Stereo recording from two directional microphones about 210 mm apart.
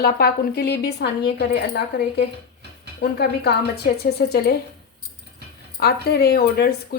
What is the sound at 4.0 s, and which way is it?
Speech, 50° left (ahead or behind).